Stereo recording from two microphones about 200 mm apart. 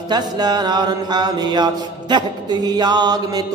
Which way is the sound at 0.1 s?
20° right (ahead or behind).